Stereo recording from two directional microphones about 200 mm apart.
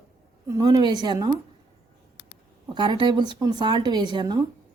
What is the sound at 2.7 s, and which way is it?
Speech, 25° right (ahead or behind).